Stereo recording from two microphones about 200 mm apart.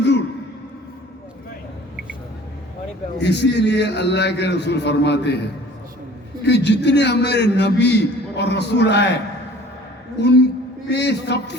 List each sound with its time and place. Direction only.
3.2 s a man's voice: 60° left (ahead or behind)
6.4 s a man's voice: 60° left (ahead or behind)
10.2 s a man's voice: 60° left (ahead or behind)